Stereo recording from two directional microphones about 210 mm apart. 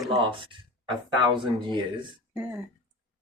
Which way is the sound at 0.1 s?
25° right (ahead or behind).